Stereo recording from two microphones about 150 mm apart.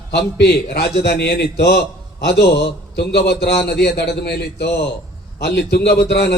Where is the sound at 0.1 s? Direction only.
90° left.